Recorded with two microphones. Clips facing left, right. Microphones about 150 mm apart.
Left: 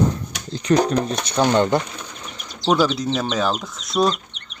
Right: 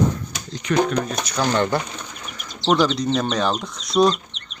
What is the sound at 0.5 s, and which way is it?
Speech, 35° left (ahead or behind).